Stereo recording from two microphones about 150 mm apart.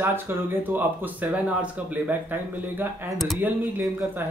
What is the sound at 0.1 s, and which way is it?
Speech, 15° right (ahead or behind).